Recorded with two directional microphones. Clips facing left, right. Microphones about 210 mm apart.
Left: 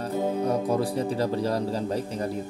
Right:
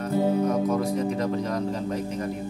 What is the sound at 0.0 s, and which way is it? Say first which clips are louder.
Speech: right 3 dB; 35° left (ahead or behind).